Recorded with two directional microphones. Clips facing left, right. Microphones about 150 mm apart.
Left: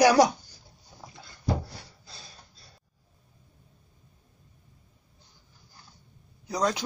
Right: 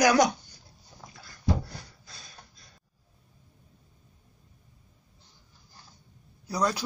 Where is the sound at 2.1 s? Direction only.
30° left (ahead or behind).